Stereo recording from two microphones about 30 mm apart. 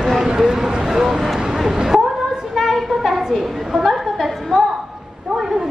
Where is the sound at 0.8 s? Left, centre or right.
Centre.